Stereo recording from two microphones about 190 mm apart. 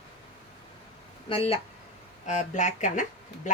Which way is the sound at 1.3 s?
30° left (ahead or behind).